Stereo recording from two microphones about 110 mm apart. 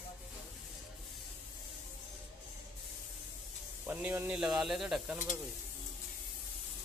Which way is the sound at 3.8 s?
15° right (ahead or behind).